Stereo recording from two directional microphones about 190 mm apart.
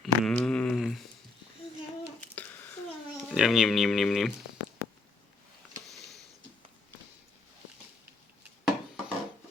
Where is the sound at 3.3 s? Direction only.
Centre (ahead or behind).